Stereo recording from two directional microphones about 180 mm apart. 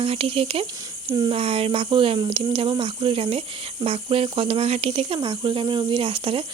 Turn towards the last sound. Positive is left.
turn(degrees=-30)  # may be behind; listen again after turning